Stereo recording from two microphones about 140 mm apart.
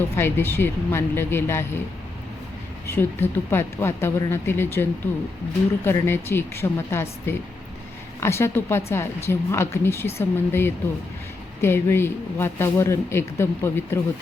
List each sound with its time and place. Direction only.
0.2 s speech: 15° left (ahead or behind)
2.8 s speech: 15° left (ahead or behind)